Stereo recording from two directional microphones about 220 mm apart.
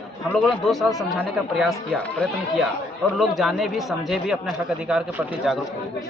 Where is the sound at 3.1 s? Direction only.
Centre (ahead or behind).